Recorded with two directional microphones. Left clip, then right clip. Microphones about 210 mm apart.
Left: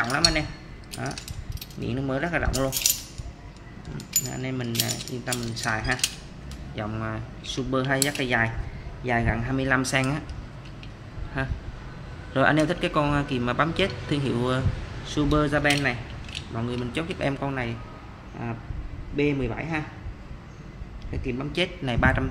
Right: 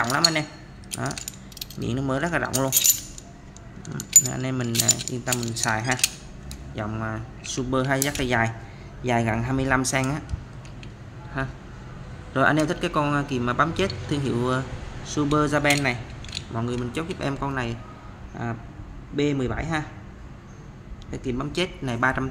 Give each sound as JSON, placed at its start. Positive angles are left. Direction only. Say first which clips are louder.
{"t": 0.0, "sound": "speech", "louder": "right 1 dB", "side_deg": -15}
{"t": 3.9, "sound": "speech", "louder": "right 10 dB", "side_deg": -35}
{"t": 4.3, "sound": "speech", "louder": "right 3 dB", "side_deg": -20}
{"t": 11.4, "sound": "a man's voice", "louder": "right 1 dB", "side_deg": -5}
{"t": 21.1, "sound": "speech", "louder": "right 2 dB", "side_deg": -15}